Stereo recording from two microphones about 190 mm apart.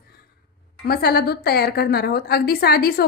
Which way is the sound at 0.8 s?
55° left (ahead or behind).